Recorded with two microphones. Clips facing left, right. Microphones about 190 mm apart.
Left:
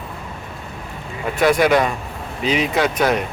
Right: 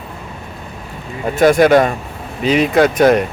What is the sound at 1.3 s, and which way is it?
Speech, 45° right (ahead or behind).